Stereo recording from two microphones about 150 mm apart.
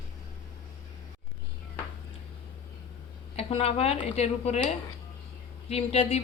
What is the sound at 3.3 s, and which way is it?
Speech, 40° left (ahead or behind).